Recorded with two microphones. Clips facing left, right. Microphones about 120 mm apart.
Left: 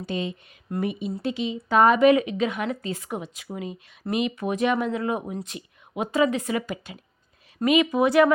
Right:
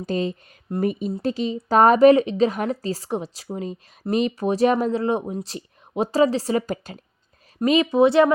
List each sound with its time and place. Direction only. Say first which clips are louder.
0.0 s a woman's voice: right 5 dB; 40° right (ahead or behind)